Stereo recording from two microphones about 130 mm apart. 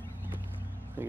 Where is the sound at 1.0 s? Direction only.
15° right (ahead or behind).